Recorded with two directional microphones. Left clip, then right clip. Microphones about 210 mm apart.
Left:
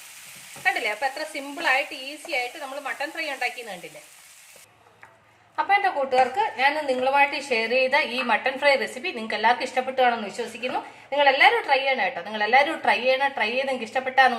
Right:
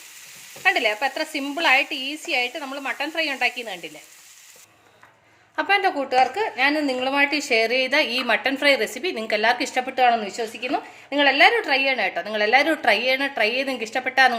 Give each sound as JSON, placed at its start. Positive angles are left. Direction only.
{"t": 0.6, "sound": "a woman's voice", "side_deg": -45}
{"t": 5.5, "sound": "a woman's voice", "side_deg": -55}